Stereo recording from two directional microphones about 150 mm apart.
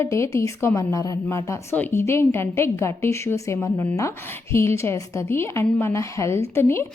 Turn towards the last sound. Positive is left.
turn(degrees=15)  # may be behind; listen again after turning